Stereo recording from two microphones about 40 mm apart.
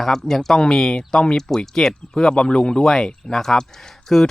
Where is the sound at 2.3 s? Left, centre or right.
Left.